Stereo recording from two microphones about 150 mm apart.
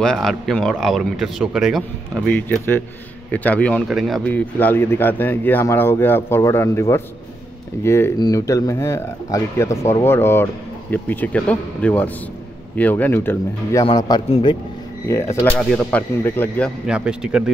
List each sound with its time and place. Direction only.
0.0 s speech: 5° left (ahead or behind)
4.3 s speech: 10° left (ahead or behind)
13.8 s speech: 25° left (ahead or behind)
15.0 s speech: 20° left (ahead or behind)
16.8 s speech: 5° right (ahead or behind)